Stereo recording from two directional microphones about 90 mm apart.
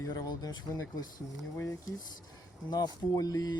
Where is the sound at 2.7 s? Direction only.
45° left (ahead or behind).